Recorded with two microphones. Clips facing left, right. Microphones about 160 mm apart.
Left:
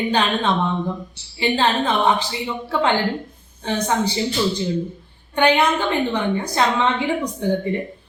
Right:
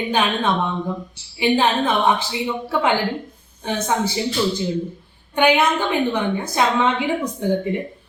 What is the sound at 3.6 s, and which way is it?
Speech, 5° right (ahead or behind).